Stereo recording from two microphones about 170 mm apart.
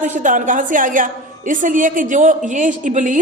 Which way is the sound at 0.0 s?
50° right (ahead or behind).